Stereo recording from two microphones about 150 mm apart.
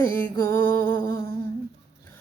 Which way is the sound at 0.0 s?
15° left (ahead or behind).